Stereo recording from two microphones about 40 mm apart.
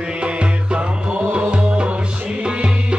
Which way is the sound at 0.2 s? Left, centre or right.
Right.